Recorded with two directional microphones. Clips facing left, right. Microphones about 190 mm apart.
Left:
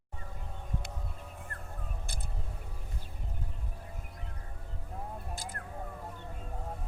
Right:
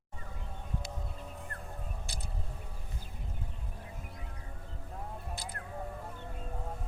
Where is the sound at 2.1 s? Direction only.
55° left (ahead or behind).